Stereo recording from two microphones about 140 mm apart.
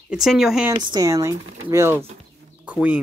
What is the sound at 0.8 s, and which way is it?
Speech, 30° right (ahead or behind).